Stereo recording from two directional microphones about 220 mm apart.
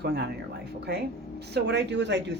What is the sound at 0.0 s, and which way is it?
Speech, 50° right (ahead or behind).